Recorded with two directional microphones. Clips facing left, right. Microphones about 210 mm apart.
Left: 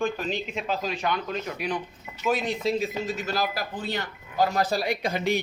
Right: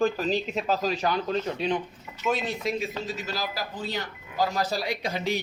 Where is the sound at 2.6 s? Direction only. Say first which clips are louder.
Left 4 dB; 30° left (ahead or behind).